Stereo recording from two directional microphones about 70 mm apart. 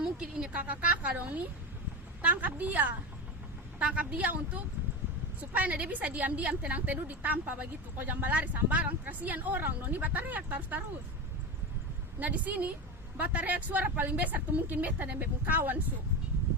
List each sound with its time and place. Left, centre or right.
0.2 s a woman's voice: centre
12.2 s a woman's voice: right